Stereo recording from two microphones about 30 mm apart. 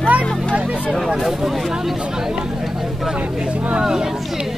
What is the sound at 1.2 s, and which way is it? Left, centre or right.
Speech, centre.